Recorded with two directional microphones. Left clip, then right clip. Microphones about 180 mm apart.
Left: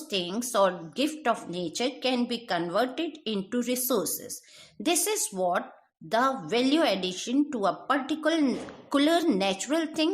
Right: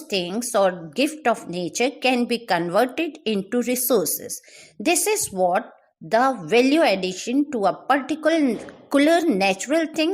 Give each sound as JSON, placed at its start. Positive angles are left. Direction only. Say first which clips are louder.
{"t": 0.1, "sound": "a woman's voice", "louder": "right 6 dB", "side_deg": -30}